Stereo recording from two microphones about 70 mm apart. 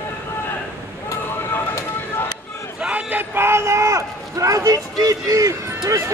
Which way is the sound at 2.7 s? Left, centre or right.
Centre.